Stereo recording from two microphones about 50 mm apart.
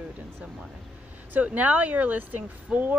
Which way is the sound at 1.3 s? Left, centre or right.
Right.